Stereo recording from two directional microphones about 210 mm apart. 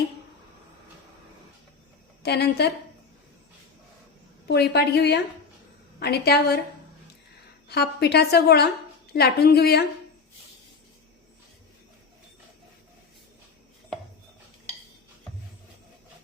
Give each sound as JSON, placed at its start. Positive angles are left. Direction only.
{"t": 2.2, "sound": "a woman's voice", "side_deg": 50}
{"t": 4.4, "sound": "a woman's voice", "side_deg": 50}
{"t": 7.7, "sound": "a woman's voice", "side_deg": 50}